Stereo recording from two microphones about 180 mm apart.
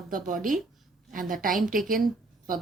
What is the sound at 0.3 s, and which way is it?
Speech, 50° right (ahead or behind).